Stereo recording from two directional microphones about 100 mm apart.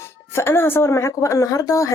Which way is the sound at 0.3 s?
25° left (ahead or behind).